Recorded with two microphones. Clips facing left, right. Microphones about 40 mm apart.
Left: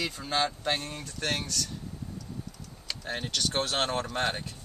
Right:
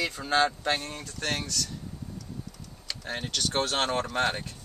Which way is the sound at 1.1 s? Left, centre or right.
Centre.